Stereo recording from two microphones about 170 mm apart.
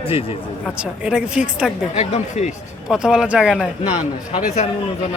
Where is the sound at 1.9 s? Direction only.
40° left (ahead or behind).